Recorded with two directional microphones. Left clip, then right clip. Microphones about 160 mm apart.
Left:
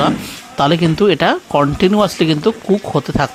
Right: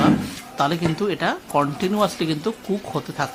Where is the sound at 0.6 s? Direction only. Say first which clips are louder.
Left 8 dB; 50° left (ahead or behind).